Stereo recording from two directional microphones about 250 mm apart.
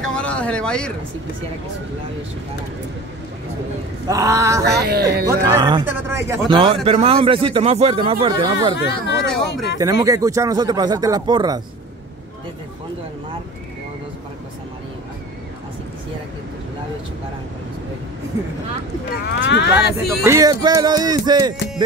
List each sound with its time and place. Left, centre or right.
0.0 s a sound: centre
4.1 s speech: centre
4.6 s speech: right
5.2 s speech: centre
9.0 s speech: left
9.8 s speech: centre
19.4 s speech: left
20.2 s speech: centre